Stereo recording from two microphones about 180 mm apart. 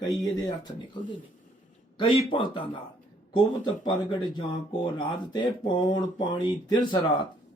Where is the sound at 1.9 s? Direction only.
30° left (ahead or behind).